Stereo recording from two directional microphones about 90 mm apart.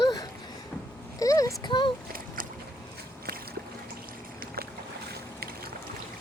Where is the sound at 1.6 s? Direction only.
60° left (ahead or behind).